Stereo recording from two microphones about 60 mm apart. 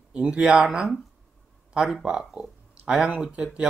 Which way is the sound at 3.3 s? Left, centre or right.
Centre.